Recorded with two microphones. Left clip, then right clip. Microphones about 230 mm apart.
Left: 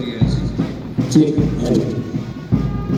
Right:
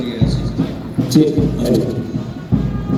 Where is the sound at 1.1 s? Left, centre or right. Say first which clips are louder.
Right 1 dB; right.